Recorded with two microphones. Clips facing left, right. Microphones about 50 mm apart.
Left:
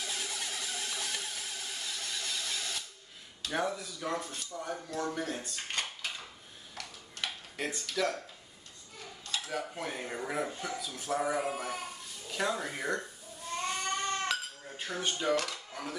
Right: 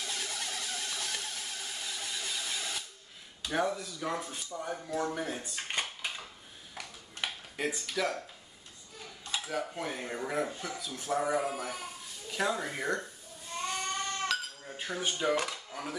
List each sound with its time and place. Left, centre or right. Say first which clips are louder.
0.0 s a sound: even; centre
3.4 s speech: right 2 dB; centre
6.7 s a sound: right 1 dB; centre
7.2 s speech: right 2 dB; centre
9.2 s dishes: right 1 dB; centre
9.5 s speech: right 2 dB; centre
14.2 s sheep: right 1 dB; centre
14.7 s speech: even; centre
15.7 s a sound: right 1 dB; centre